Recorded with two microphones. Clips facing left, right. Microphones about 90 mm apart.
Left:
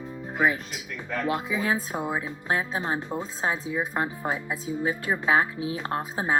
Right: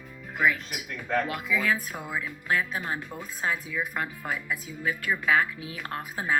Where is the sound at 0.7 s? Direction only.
25° left (ahead or behind).